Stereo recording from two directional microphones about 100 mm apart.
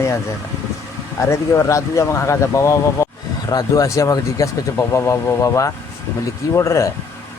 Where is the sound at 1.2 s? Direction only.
30° left (ahead or behind).